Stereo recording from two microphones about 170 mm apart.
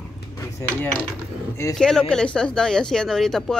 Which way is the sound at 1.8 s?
5° left (ahead or behind).